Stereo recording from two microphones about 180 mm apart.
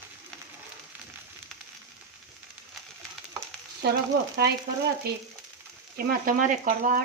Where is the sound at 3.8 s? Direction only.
65° right (ahead or behind).